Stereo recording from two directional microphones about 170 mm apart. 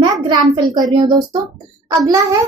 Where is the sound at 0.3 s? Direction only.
25° right (ahead or behind).